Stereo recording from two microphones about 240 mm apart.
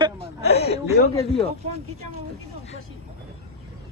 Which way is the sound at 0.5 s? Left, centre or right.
Left.